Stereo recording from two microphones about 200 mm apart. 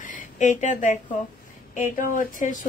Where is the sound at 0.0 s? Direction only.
40° left (ahead or behind).